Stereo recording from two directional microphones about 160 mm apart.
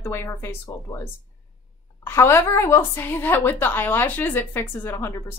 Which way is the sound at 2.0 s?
15° left (ahead or behind).